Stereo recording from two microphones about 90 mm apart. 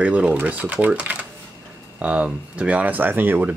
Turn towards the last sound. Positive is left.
turn(degrees=-20)  # may be behind; listen again after turning